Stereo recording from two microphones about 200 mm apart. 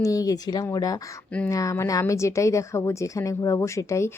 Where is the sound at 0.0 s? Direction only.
15° left (ahead or behind).